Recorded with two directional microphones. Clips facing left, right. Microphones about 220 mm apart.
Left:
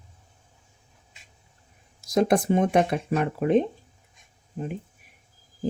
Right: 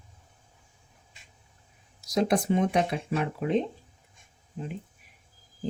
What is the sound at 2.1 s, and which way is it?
Speech, 50° left (ahead or behind).